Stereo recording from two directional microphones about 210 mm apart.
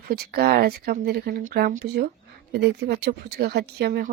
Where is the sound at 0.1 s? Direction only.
50° right (ahead or behind).